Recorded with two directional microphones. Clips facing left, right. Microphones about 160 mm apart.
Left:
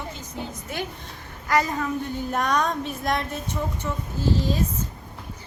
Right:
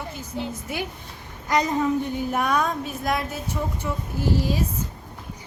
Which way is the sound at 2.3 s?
10° right (ahead or behind).